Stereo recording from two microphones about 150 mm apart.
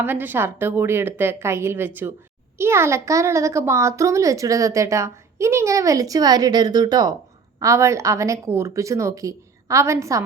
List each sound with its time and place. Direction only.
0.0 s a woman's voice: 15° right (ahead or behind)